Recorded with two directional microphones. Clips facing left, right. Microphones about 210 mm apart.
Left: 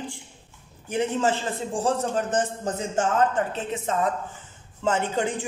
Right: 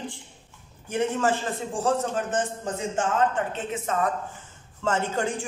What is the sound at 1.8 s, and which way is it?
Speech, 35° left (ahead or behind).